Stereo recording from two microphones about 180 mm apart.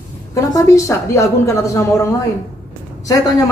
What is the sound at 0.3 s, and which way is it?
A woman's voice, 15° left (ahead or behind).